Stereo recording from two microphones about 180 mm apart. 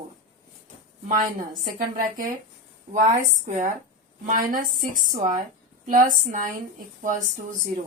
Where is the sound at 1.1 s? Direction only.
50° right (ahead or behind).